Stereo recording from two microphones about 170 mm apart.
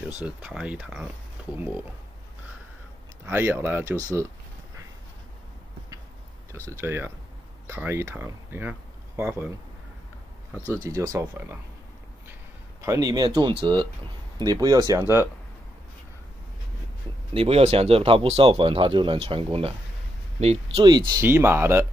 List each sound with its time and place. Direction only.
0.2 s speech: 5° right (ahead or behind)
3.3 s speech: 10° right (ahead or behind)
6.7 s speech: 15° right (ahead or behind)
10.8 s speech: 15° right (ahead or behind)
12.8 s speech: 20° right (ahead or behind)
17.3 s speech: 35° right (ahead or behind)
20.7 s speech: 25° right (ahead or behind)
21.1 s speech: 15° right (ahead or behind)